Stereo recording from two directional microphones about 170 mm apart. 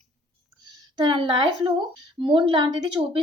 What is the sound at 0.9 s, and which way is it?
A woman's voice, 25° right (ahead or behind).